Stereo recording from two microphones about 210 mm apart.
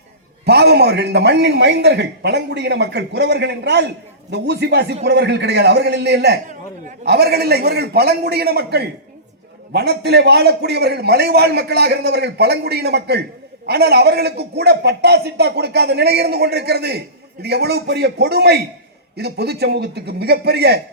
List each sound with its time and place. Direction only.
0.4 s a man's voice: 50° right (ahead or behind)